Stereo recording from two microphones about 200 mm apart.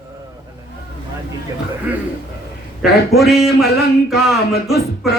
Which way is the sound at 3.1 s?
Centre (ahead or behind).